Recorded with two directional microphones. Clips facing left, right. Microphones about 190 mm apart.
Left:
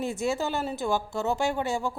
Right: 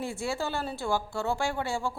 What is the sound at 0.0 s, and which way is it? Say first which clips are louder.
A woman's voice: left 4 dB; 20° left (ahead or behind).